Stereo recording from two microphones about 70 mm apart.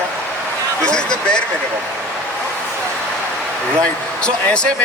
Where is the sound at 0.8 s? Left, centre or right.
Centre.